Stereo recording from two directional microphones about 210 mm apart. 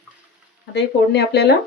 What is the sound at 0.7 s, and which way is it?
Speech, 55° left (ahead or behind).